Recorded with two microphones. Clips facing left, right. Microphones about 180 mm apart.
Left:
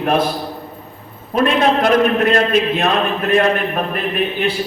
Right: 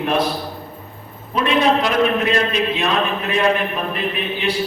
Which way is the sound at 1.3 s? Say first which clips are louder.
Left 2 dB; 50° left (ahead or behind).